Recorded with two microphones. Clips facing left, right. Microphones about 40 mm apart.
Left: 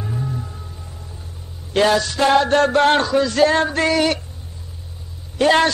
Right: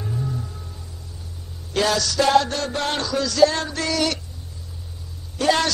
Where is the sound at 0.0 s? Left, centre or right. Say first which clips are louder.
Left 2 dB; centre.